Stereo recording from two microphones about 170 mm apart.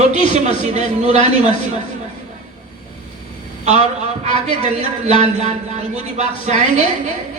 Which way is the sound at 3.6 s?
40° right (ahead or behind).